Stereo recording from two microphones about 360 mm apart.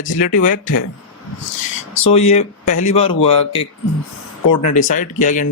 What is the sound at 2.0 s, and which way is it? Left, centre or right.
A man's voice, centre.